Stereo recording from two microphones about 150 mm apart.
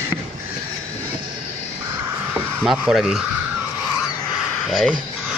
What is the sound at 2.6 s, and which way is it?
Speech, 5° right (ahead or behind).